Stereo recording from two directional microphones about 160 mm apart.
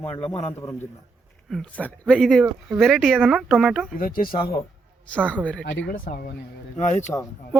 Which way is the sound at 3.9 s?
60° left (ahead or behind).